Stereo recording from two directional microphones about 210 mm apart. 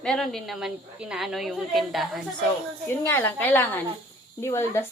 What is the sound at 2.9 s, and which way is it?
Speech, 10° left (ahead or behind).